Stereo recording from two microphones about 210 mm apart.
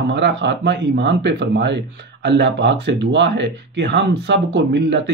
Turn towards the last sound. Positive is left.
turn(degrees=-55)  # may be behind; listen again after turning